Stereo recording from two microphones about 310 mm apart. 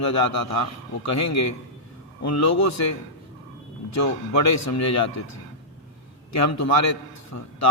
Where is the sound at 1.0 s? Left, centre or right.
Left.